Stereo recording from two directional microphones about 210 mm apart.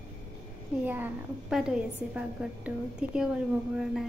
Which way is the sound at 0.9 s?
5° right (ahead or behind).